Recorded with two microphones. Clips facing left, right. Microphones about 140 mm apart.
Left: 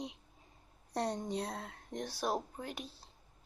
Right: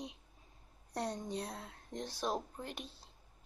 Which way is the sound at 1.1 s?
15° left (ahead or behind).